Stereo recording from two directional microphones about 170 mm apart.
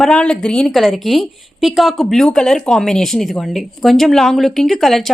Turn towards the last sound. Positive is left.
turn(degrees=0)  # may be behind; listen again after turning